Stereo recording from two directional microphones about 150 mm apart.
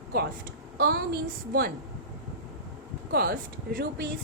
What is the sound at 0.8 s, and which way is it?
Speech, 90° right.